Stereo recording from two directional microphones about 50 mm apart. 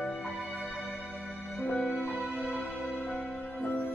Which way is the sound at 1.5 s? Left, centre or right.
Left.